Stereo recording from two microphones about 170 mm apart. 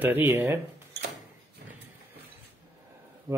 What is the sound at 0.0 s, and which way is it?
Speech, 10° right (ahead or behind).